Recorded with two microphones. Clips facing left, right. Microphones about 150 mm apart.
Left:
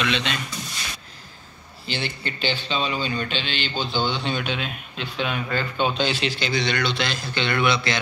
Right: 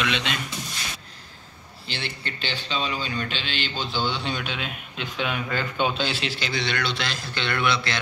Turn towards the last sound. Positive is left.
turn(degrees=0)  # may be behind; listen again after turning